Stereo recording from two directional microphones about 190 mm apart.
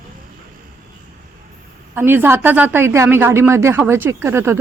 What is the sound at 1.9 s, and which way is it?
Speech, 10° right (ahead or behind).